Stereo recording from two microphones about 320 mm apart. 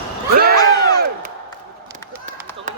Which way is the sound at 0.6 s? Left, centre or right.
Centre.